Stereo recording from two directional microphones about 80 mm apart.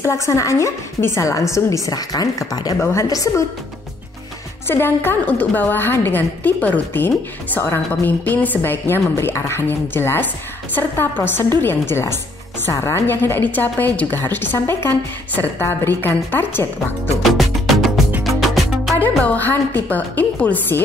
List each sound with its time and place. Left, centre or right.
0.0 s a woman's voice: left
1.9 s speech: left
2.8 s a woman's voice: left
4.6 s a woman's voice: left
17.2 s music: centre
18.9 s a woman's voice: left